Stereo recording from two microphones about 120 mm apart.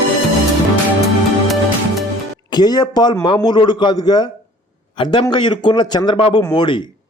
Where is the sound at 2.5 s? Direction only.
35° left (ahead or behind).